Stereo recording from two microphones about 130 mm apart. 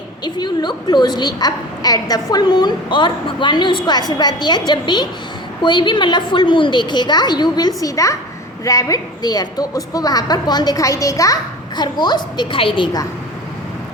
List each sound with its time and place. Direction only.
0.3 s a woman's voice: 35° left (ahead or behind)